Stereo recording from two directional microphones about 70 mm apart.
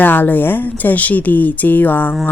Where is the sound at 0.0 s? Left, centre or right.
Left.